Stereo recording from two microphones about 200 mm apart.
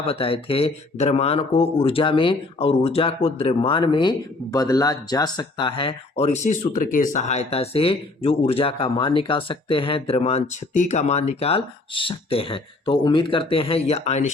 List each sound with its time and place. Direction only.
0.0 s speech: 30° left (ahead or behind)